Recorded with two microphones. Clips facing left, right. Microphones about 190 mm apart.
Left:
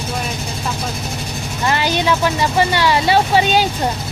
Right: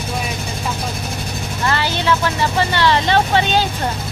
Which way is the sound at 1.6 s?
15° left (ahead or behind).